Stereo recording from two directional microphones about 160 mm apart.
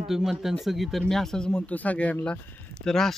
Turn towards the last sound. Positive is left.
turn(degrees=5)  # may be behind; listen again after turning